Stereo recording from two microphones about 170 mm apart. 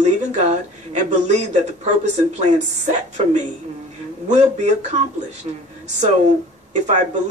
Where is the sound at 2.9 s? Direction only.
45° right (ahead or behind).